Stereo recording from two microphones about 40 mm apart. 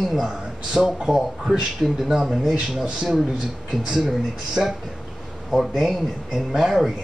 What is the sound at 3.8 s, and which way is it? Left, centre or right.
Speech, centre.